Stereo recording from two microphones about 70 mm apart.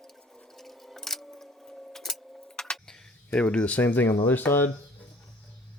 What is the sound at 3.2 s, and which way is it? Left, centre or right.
Speech, centre.